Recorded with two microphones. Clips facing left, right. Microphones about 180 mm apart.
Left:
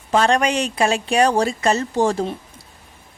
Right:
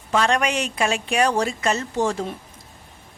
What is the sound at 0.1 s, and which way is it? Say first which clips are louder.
A woman's voice: left 3 dB; 35° left (ahead or behind).